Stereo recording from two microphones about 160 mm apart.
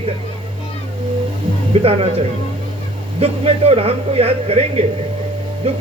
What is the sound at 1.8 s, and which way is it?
Speech, 40° right (ahead or behind).